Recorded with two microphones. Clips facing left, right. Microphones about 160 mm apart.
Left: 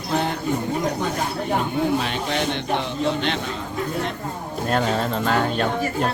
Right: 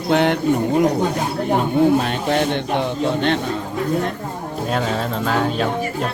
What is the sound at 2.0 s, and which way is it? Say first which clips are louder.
A man's voice: right 5 dB; 50° right (ahead or behind).